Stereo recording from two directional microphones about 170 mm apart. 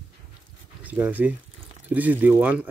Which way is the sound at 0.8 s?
10° right (ahead or behind).